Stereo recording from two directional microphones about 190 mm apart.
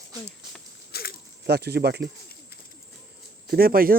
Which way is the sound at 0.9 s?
55° left (ahead or behind).